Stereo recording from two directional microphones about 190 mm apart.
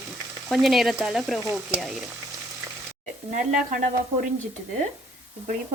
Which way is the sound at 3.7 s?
50° right (ahead or behind).